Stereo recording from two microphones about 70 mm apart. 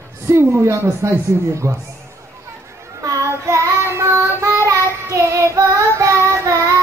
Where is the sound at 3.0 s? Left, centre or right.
Right.